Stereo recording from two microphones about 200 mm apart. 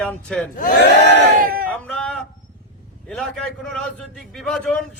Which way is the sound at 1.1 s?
50° right (ahead or behind).